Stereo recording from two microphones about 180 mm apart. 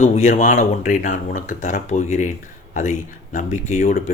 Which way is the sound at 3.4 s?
45° left (ahead or behind).